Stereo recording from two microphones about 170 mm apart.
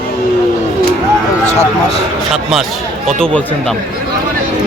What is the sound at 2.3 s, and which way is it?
A man's voice, centre (ahead or behind).